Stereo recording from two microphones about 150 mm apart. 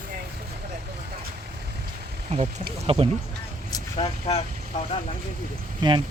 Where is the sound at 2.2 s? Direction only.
40° right (ahead or behind).